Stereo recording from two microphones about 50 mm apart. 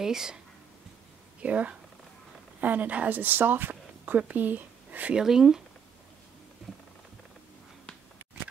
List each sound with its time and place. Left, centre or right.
0.0 s speech: centre
1.4 s speech: right
5.1 s speech: centre